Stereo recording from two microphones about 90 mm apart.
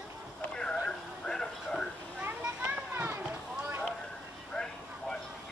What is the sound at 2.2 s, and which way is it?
Children playing, 20° right (ahead or behind).